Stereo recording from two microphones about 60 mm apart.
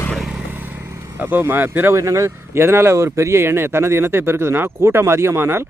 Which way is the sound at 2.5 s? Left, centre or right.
Right.